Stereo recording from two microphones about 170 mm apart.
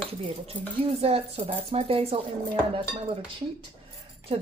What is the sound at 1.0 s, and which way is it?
Speech, 35° right (ahead or behind).